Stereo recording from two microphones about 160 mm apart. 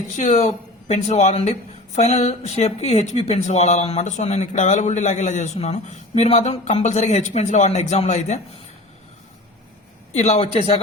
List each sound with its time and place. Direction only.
0.1 s speech: 50° left (ahead or behind)
10.2 s speech: 40° left (ahead or behind)